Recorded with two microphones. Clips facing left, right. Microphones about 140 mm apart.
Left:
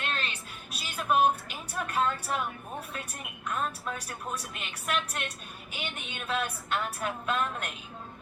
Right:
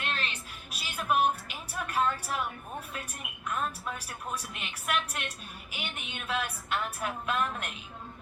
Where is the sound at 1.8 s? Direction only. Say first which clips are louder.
Even; 5° right (ahead or behind).